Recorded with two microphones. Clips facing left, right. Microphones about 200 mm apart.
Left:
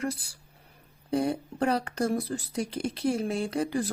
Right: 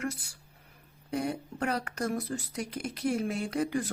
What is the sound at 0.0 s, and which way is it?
Speech, 35° left (ahead or behind).